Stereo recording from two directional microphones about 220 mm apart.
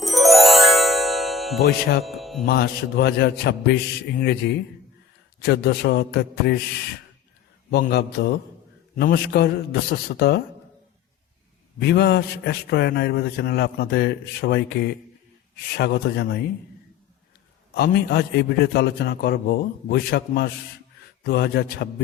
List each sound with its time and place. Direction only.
0.0 s music: centre (ahead or behind)
2.5 s a man's voice: 50° left (ahead or behind)
7.7 s a man's voice: 50° left (ahead or behind)
11.8 s a man's voice: 50° left (ahead or behind)
17.7 s a man's voice: 45° left (ahead or behind)